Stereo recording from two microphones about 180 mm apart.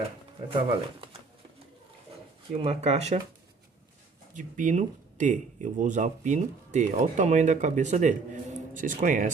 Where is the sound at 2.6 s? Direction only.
35° right (ahead or behind).